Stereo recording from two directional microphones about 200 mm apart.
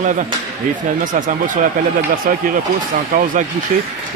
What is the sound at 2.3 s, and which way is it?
Speech, 45° right (ahead or behind).